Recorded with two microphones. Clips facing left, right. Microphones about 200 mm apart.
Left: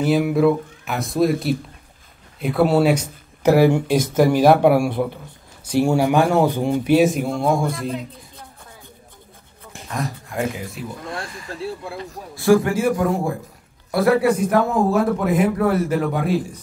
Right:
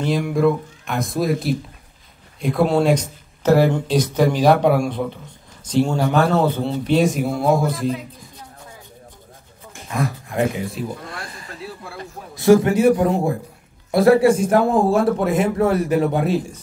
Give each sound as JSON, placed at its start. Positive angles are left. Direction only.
{"t": 0.0, "sound": "speech", "side_deg": 5}
{"t": 11.1, "sound": "speech", "side_deg": 25}
{"t": 12.4, "sound": "speech", "side_deg": -20}